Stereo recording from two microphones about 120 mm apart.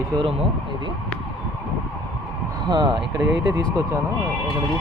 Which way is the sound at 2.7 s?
40° right (ahead or behind).